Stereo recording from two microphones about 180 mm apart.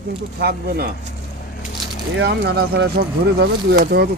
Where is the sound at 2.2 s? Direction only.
65° right (ahead or behind).